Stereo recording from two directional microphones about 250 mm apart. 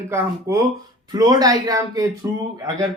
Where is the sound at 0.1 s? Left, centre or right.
Centre.